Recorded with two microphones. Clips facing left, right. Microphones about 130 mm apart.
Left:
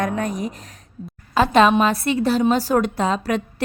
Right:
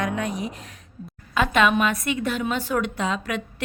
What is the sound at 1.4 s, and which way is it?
A woman's voice, 35° left (ahead or behind).